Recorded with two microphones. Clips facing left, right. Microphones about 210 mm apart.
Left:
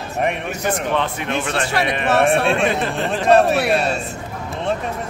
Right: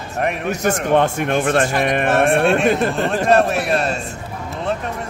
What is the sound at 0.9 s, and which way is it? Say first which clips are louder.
Speech: right 5 dB; 50° right (ahead or behind).